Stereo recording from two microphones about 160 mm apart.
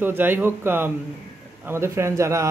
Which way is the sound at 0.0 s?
10° right (ahead or behind).